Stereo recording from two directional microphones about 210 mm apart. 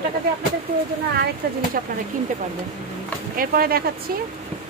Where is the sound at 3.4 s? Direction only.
45° right (ahead or behind).